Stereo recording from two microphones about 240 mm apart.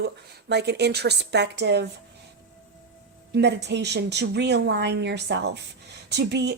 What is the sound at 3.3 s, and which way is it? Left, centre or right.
Speech, right.